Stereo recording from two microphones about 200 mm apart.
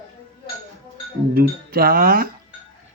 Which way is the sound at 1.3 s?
50° right (ahead or behind).